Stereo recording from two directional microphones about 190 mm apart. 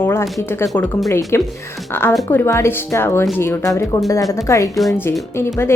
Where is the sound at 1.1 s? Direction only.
15° left (ahead or behind).